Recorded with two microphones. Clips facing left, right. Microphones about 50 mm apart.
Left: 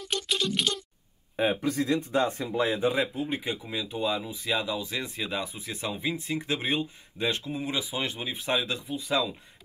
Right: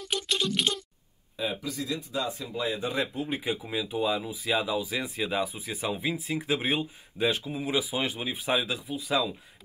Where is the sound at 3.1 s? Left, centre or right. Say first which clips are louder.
Even; centre.